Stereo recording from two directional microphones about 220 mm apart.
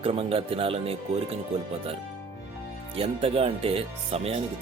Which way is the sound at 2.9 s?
25° right (ahead or behind).